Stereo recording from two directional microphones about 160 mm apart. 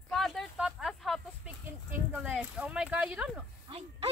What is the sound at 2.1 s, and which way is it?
Speech, 10° right (ahead or behind).